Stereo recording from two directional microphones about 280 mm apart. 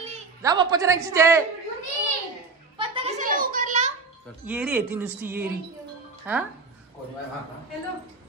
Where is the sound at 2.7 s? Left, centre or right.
Centre.